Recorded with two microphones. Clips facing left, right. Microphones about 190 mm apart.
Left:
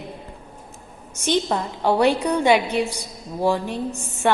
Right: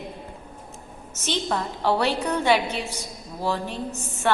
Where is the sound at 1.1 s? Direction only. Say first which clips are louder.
Left 5 dB; 15° left (ahead or behind).